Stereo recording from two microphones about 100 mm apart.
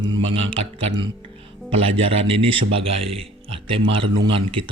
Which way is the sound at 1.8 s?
75° right (ahead or behind).